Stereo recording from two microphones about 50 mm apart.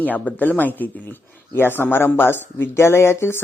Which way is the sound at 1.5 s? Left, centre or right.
Left.